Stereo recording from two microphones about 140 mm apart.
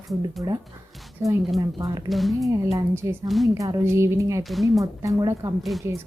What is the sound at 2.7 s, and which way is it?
Speech, 20° right (ahead or behind).